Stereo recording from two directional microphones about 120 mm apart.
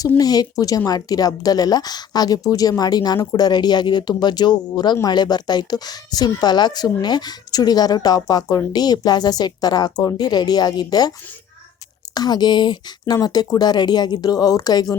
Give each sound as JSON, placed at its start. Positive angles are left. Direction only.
{"t": 0.2, "sound": "speech", "side_deg": 30}
{"t": 12.1, "sound": "speech", "side_deg": 35}